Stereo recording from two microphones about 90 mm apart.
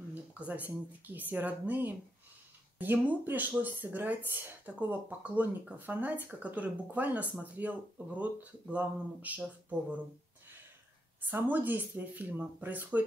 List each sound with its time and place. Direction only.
0.1 s speech: 15° right (ahead or behind)
11.4 s speech: 20° right (ahead or behind)